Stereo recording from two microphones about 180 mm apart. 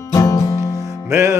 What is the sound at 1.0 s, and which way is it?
Music, 15° right (ahead or behind).